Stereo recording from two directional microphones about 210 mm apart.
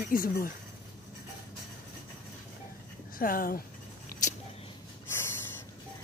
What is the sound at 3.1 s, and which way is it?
Speech, 45° left (ahead or behind).